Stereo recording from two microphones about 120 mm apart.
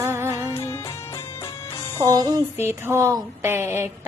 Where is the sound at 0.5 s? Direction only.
25° left (ahead or behind).